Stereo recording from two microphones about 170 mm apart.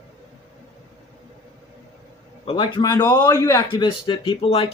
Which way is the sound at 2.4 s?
30° left (ahead or behind).